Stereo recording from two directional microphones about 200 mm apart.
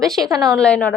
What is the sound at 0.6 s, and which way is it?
Speech, 5° left (ahead or behind).